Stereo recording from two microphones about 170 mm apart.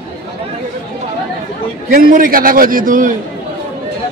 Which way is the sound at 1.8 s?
55° right (ahead or behind).